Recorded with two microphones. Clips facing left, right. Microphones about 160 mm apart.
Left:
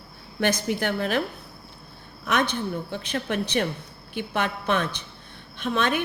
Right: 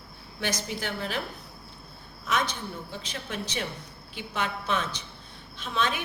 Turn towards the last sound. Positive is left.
turn(degrees=55)  # may be behind; listen again after turning